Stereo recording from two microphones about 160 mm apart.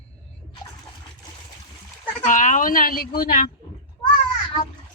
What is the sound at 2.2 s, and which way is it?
A woman's voice, 55° left (ahead or behind).